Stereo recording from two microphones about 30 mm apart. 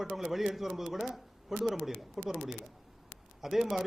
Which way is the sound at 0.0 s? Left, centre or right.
Centre.